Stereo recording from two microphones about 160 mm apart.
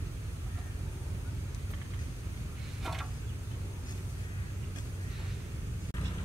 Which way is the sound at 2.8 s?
Centre (ahead or behind).